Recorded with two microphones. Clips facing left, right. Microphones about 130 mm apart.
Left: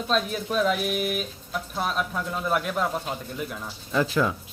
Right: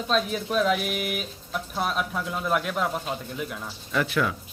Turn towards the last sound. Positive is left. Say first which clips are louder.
# left 2 dB
turn(degrees=25)  # may be behind; listen again after turning